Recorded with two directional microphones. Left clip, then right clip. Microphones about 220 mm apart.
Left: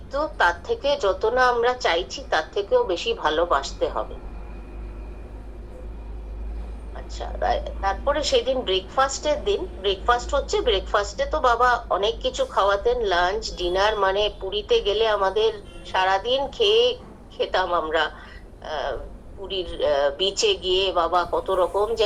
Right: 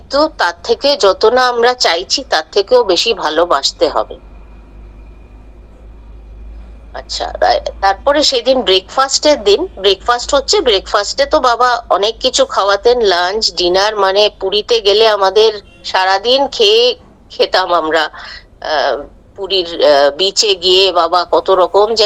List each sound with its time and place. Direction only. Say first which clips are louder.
0.1 s a woman's voice: right 9 dB; 55° right (ahead or behind)
6.9 s a woman's voice: right 15 dB; 55° right (ahead or behind)